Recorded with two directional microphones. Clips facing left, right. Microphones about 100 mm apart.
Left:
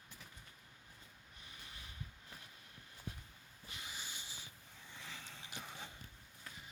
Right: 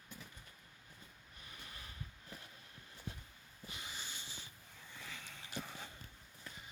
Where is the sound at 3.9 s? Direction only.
10° left (ahead or behind).